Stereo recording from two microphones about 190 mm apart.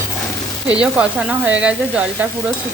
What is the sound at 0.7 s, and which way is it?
Speech, 5° right (ahead or behind).